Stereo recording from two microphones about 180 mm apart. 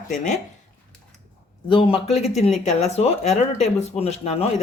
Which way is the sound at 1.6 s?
30° left (ahead or behind).